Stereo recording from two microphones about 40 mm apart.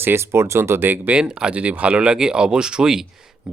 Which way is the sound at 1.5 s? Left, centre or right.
Right.